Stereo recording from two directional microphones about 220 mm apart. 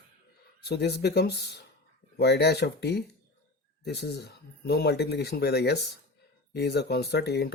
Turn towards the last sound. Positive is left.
turn(degrees=45)  # may be behind; listen again after turning